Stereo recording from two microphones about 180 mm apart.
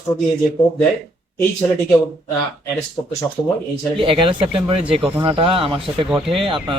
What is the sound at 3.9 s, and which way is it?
Speech, 30° right (ahead or behind).